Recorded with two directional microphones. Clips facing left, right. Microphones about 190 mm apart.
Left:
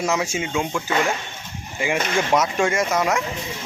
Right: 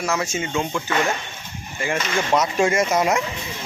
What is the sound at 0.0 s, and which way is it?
Speech, 15° left (ahead or behind).